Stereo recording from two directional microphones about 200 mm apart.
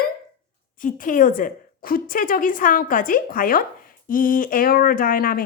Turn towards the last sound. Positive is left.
turn(degrees=45)  # may be behind; listen again after turning